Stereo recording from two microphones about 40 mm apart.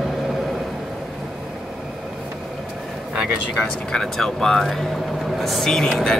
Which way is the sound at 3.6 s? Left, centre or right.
Left.